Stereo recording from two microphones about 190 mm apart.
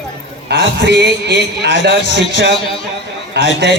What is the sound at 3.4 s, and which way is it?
Speech, 60° right (ahead or behind).